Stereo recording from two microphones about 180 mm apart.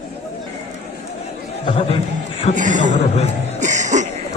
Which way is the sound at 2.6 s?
45° right (ahead or behind).